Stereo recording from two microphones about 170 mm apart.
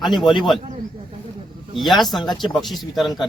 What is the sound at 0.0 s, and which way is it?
Speech, centre (ahead or behind).